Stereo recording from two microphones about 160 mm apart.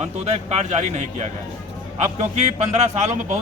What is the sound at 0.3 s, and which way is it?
A man's voice, 45° right (ahead or behind).